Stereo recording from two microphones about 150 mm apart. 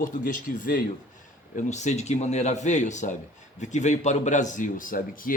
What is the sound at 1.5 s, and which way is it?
Speech, 50° left (ahead or behind).